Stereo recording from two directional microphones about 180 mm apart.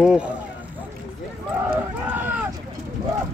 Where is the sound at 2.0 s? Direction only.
10° right (ahead or behind).